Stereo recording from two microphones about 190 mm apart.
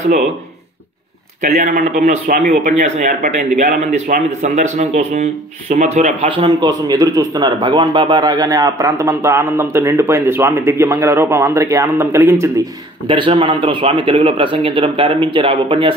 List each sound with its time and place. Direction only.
1.4 s speech: 40° right (ahead or behind)